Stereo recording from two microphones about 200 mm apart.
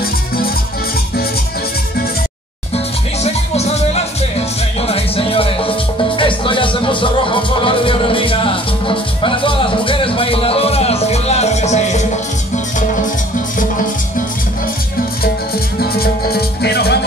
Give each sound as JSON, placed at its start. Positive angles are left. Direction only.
{"t": 3.3, "sound": "music", "side_deg": 30}
{"t": 15.8, "sound": "music", "side_deg": 50}